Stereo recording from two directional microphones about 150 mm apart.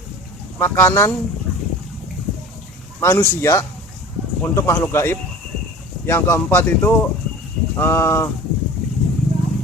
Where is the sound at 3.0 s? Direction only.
15° left (ahead or behind).